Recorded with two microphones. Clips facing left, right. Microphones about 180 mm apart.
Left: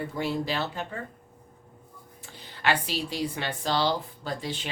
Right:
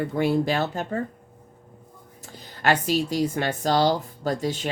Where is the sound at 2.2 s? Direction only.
40° right (ahead or behind).